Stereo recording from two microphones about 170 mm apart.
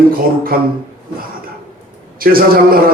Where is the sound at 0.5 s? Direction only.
60° right (ahead or behind).